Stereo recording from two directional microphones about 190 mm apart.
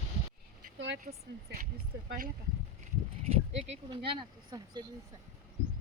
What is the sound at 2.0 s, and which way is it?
Speech, 50° right (ahead or behind).